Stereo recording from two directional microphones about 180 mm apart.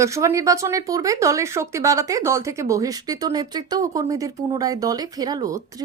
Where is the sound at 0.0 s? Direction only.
15° right (ahead or behind).